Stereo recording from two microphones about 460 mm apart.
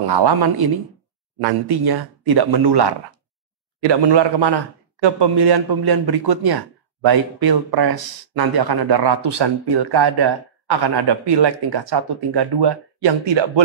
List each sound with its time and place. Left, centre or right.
0.0 s speech: right